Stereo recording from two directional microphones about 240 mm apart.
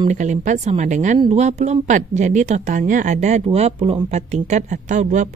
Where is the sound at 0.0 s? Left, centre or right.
Right.